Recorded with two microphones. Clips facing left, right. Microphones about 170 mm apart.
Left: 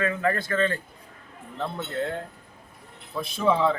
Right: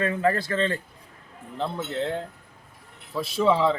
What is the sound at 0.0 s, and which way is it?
Speech, 30° right (ahead or behind).